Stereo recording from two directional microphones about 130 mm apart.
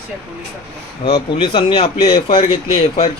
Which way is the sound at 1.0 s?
35° left (ahead or behind).